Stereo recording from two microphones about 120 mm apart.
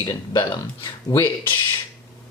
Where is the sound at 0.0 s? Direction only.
40° left (ahead or behind).